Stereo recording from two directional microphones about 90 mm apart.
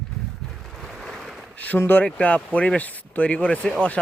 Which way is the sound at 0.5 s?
5° left (ahead or behind).